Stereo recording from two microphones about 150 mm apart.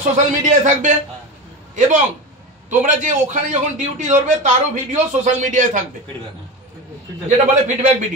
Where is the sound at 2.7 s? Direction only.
55° right (ahead or behind).